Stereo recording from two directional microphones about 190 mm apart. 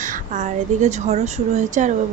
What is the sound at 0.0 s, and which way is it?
A woman's voice, 40° right (ahead or behind).